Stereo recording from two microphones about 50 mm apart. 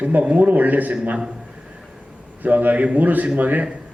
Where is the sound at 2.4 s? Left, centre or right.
Right.